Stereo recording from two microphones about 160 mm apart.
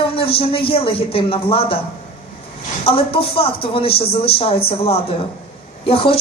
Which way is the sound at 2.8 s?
35° left (ahead or behind).